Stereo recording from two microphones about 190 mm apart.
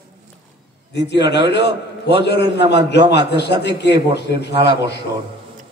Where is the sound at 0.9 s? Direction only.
65° left (ahead or behind).